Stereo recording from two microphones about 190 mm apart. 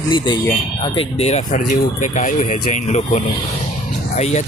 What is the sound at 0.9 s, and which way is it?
Speech, 35° left (ahead or behind).